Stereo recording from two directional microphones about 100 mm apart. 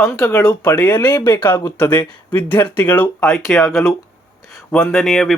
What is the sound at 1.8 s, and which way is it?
Speech, 15° left (ahead or behind).